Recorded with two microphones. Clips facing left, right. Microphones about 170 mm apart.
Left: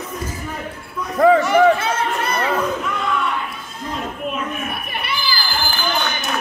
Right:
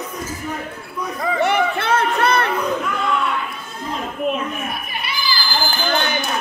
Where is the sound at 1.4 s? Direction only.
65° right (ahead or behind).